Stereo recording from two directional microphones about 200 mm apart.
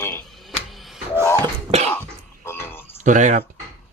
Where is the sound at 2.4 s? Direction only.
10° left (ahead or behind).